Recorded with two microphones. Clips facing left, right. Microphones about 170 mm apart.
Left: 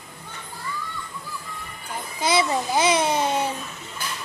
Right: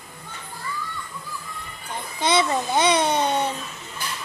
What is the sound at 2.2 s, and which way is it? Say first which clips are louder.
Babbling: right 1 dB; 5° left (ahead or behind).